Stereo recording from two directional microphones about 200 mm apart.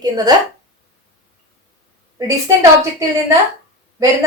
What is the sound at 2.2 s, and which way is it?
Speech, 15° right (ahead or behind).